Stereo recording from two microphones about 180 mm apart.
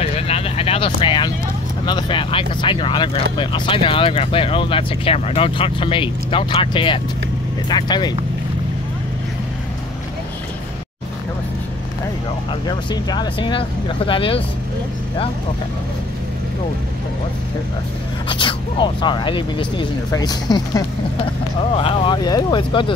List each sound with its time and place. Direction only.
0.0 s vehicle: 35° left (ahead or behind)
1.9 s speech: 25° left (ahead or behind)
12.6 s speech: 25° left (ahead or behind)
18.3 s speech: 25° left (ahead or behind)